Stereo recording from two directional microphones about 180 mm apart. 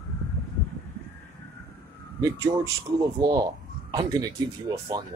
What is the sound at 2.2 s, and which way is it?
Speech, 20° right (ahead or behind).